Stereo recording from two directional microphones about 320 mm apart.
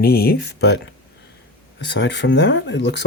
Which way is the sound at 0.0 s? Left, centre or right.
Left.